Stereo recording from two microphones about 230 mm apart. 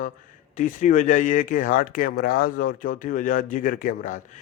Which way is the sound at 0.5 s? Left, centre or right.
Left.